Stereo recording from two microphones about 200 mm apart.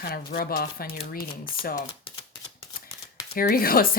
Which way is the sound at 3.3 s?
50° left (ahead or behind).